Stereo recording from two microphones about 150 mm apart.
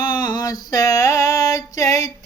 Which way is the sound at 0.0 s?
30° left (ahead or behind).